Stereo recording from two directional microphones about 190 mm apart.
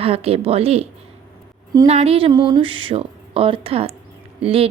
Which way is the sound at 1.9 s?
30° right (ahead or behind).